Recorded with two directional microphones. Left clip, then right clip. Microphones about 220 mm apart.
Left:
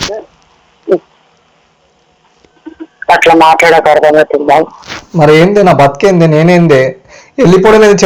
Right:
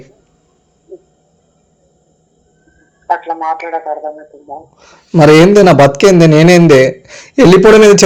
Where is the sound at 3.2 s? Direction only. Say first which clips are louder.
Left 14 dB; 65° left (ahead or behind).